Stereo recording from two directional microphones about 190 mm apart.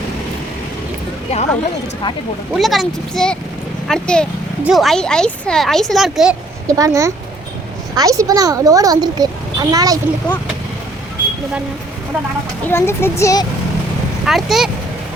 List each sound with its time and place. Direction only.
1.3 s speech: 35° left (ahead or behind)
2.5 s speech: centre (ahead or behind)
6.7 s speech: 15° right (ahead or behind)
12.6 s a child's voice: 15° left (ahead or behind)
14.3 s speech: centre (ahead or behind)